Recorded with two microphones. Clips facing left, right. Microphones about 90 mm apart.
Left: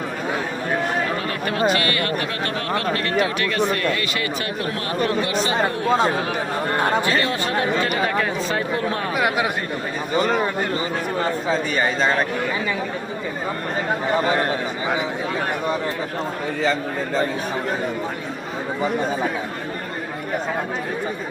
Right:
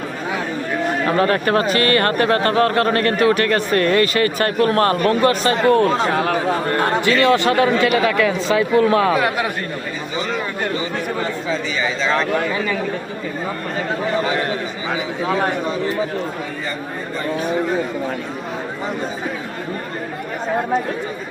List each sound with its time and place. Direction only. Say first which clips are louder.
1.2 s a man's voice: right 5 dB; 45° right (ahead or behind)
5.6 s speech: right 9 dB; 60° right (ahead or behind)
6.1 s speech: right 4 dB; 75° right (ahead or behind)
7.0 s speech: right 7 dB; 90° right
10.2 s a man's voice: left 4 dB; 45° left (ahead or behind)